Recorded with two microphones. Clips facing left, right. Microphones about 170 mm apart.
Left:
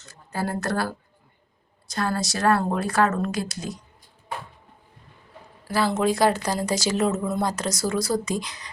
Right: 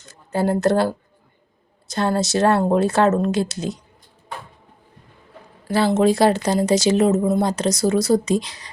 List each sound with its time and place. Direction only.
0.0 s speech: 20° right (ahead or behind)
5.6 s speech: 25° right (ahead or behind)